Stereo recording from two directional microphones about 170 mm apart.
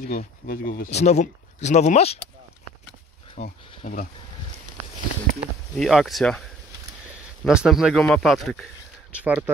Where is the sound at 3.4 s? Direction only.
55° left (ahead or behind).